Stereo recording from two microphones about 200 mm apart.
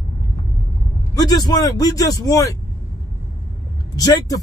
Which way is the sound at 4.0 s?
20° left (ahead or behind).